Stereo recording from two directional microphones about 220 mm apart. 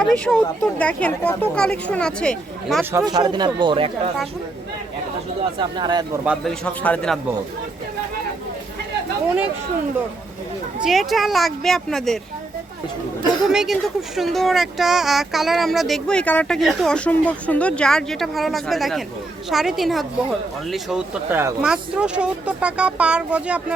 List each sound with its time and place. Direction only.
0.0 s speech: 5° left (ahead or behind)
2.9 s speech: 15° right (ahead or behind)
5.5 s speech: 20° right (ahead or behind)
6.2 s speech: centre (ahead or behind)
10.8 s speech: centre (ahead or behind)
13.5 s speech: centre (ahead or behind)